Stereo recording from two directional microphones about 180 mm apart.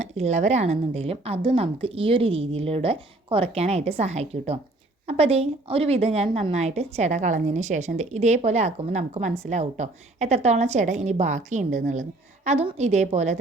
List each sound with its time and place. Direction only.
0.0 s a woman's voice: 40° right (ahead or behind)